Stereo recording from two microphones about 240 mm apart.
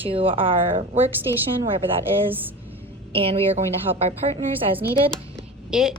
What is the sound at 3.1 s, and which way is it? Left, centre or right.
A woman's voice, right.